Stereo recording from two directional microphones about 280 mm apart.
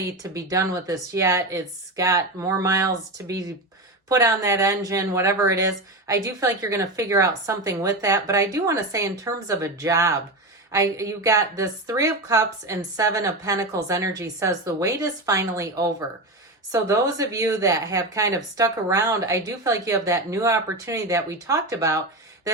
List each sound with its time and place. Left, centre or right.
0.2 s speech: centre